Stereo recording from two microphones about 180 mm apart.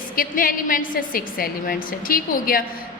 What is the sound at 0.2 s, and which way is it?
A woman's voice, 50° left (ahead or behind).